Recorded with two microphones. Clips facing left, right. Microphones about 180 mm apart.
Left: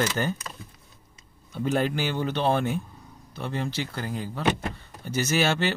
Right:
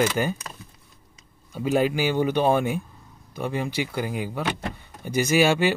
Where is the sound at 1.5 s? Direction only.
10° right (ahead or behind).